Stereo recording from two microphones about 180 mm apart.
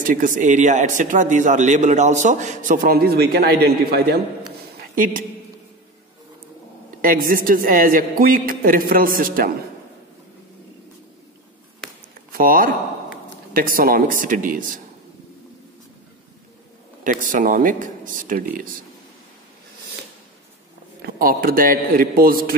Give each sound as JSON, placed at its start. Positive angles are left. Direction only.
{"t": 0.0, "sound": "a man's voice", "side_deg": -50}
{"t": 4.9, "sound": "a woman's voice", "side_deg": -50}
{"t": 7.0, "sound": "a man's voice", "side_deg": -50}
{"t": 12.3, "sound": "a man's voice", "side_deg": -50}
{"t": 17.0, "sound": "a man's voice", "side_deg": -45}
{"t": 21.0, "sound": "a man's voice", "side_deg": -55}